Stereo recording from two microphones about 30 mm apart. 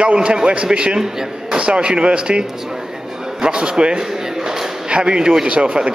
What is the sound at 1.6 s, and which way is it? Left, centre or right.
A man's voice, right.